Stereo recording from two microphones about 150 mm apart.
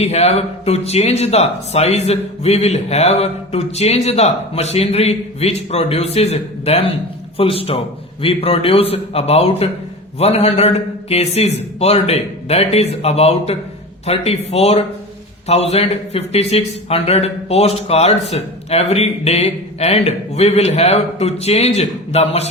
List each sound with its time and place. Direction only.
0.0 s a man's voice: 45° left (ahead or behind)